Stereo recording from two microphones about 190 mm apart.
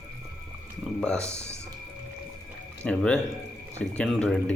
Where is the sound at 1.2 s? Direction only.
15° right (ahead or behind).